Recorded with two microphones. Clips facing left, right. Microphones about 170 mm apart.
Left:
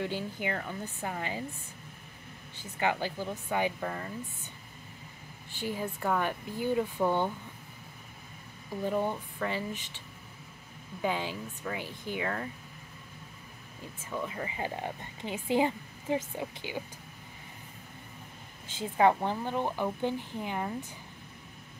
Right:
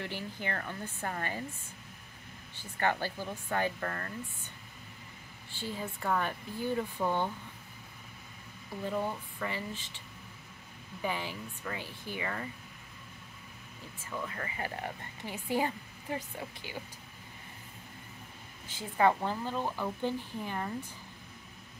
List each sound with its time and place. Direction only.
0.0 s speech: 10° left (ahead or behind)
2.5 s speech: 15° left (ahead or behind)
5.6 s speech: 15° left (ahead or behind)
8.8 s speech: 15° left (ahead or behind)
11.0 s speech: 15° left (ahead or behind)
12.2 s speech: centre (ahead or behind)
14.1 s speech: 15° left (ahead or behind)
18.7 s speech: 20° left (ahead or behind)